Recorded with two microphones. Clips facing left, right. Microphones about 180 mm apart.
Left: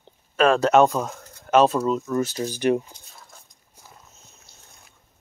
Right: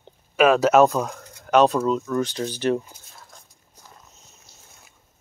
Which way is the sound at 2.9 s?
5° right (ahead or behind).